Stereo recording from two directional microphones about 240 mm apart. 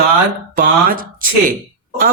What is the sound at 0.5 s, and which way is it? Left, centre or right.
Speech, right.